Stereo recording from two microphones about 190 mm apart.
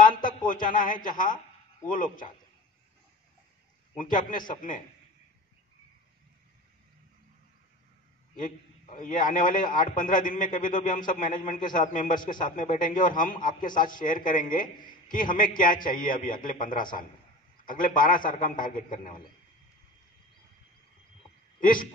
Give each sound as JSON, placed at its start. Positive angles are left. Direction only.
{"t": 0.0, "sound": "a sound", "side_deg": 45}
{"t": 0.5, "sound": "a man's voice", "side_deg": 45}
{"t": 3.9, "sound": "a man's voice", "side_deg": 45}
{"t": 8.4, "sound": "a man's voice", "side_deg": 45}
{"t": 21.5, "sound": "speech", "side_deg": 45}